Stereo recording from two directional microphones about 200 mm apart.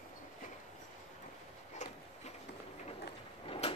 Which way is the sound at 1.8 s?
35° left (ahead or behind).